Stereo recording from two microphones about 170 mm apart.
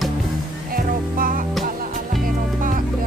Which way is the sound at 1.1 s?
55° right (ahead or behind).